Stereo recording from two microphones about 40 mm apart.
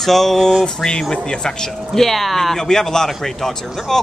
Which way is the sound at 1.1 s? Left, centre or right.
Left.